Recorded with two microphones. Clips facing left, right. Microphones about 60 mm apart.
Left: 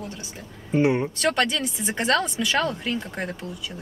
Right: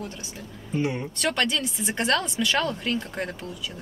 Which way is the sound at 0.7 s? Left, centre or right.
Left.